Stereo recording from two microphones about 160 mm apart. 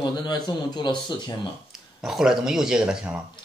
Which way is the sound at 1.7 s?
5° right (ahead or behind).